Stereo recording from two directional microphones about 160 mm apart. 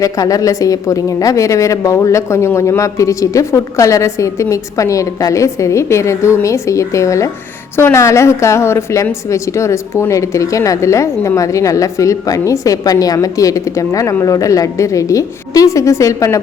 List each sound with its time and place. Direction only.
0.0 s a woman's voice: 20° left (ahead or behind)